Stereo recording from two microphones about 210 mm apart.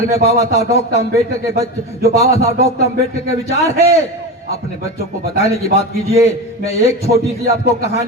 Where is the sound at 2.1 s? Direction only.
30° left (ahead or behind).